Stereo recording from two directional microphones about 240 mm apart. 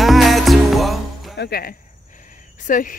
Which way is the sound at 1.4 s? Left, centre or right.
Left.